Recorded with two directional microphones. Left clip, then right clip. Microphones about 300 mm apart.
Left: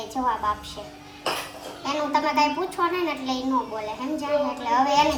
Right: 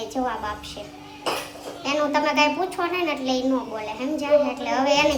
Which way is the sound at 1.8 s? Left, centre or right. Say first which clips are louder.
Right 2 dB; centre.